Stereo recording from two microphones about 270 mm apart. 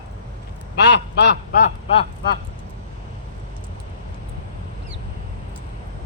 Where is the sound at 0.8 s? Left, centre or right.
Left.